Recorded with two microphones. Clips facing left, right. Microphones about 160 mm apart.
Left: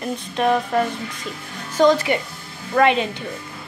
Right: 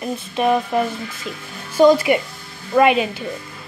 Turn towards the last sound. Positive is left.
turn(degrees=-10)  # may be behind; listen again after turning